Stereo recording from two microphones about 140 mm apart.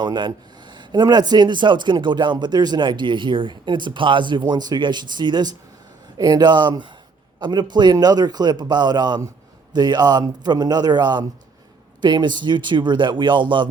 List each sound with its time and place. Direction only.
0.0 s a man's voice: 30° right (ahead or behind)